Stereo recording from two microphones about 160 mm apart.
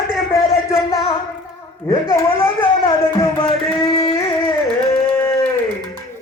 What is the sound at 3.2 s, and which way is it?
Music, 35° left (ahead or behind).